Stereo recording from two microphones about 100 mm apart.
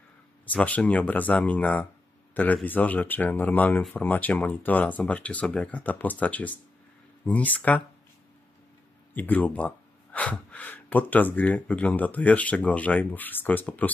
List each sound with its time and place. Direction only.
0.5 s speech: 15° left (ahead or behind)
9.1 s speech: 15° left (ahead or behind)